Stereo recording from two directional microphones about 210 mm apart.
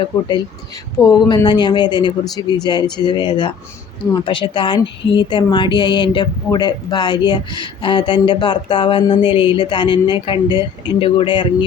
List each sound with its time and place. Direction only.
0.0 s a woman's voice: 20° left (ahead or behind)